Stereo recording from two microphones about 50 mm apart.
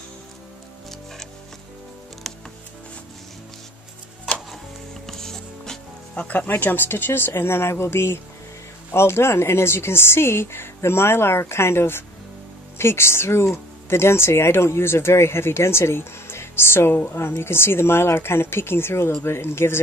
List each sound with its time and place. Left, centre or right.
2.3 s music: centre
5.0 s music: centre
6.1 s speech: left
6.4 s speech: left